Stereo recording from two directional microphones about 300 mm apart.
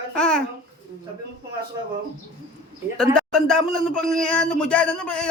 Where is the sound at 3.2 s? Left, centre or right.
Centre.